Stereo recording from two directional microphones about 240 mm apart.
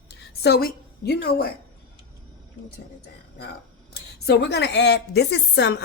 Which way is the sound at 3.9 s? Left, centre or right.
Left.